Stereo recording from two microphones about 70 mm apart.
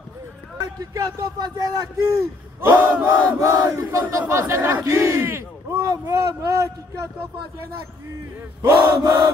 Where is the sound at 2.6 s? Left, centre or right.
Right.